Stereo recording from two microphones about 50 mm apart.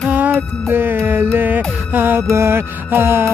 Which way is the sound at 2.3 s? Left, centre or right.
Right.